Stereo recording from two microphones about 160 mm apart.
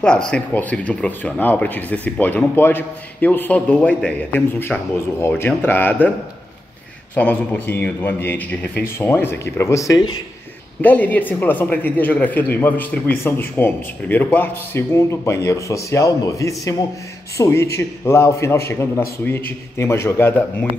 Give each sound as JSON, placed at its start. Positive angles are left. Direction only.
{"t": 0.3, "sound": "speech", "side_deg": 10}
{"t": 7.2, "sound": "speech", "side_deg": 10}